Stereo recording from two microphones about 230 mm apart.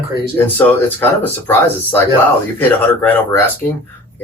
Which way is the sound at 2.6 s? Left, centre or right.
Centre.